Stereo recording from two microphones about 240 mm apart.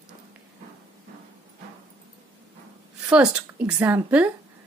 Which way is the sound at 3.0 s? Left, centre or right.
Centre.